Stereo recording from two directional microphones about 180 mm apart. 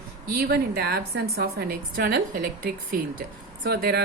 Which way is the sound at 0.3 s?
55° right (ahead or behind).